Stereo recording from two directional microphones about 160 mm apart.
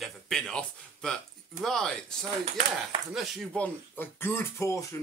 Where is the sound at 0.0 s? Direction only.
5° left (ahead or behind).